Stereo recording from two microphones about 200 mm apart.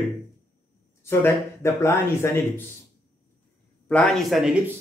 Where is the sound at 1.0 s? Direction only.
15° left (ahead or behind).